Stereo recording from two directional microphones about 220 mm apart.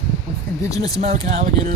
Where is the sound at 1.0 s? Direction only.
30° right (ahead or behind).